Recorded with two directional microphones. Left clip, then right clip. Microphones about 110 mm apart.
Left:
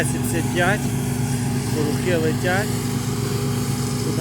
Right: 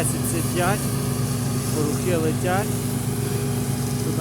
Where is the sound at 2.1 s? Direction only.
10° right (ahead or behind).